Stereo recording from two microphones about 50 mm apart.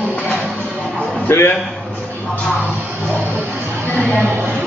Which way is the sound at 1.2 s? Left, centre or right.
Left.